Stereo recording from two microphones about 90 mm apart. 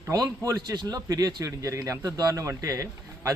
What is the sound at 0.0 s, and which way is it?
A man's voice, 40° right (ahead or behind).